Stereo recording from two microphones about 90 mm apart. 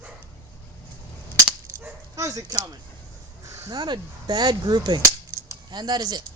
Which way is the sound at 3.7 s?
55° right (ahead or behind).